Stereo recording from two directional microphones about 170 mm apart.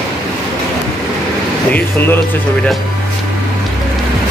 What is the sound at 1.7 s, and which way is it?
Speech, 10° left (ahead or behind).